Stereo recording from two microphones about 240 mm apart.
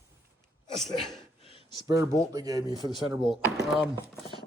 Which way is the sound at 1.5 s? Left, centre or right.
Left.